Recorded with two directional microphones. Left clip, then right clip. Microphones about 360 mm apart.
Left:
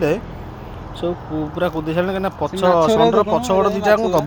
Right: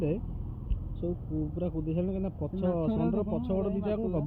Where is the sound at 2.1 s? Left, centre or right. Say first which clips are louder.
Left 15 dB; centre.